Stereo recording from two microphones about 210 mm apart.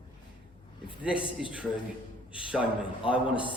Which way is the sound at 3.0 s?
5° right (ahead or behind).